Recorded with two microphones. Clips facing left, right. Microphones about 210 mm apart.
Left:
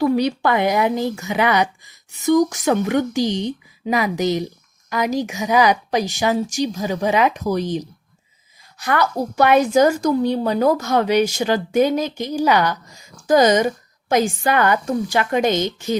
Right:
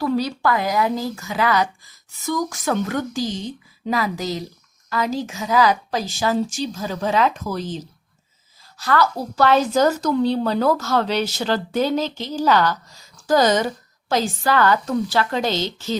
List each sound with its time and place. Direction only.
0.0 s speech: 20° left (ahead or behind)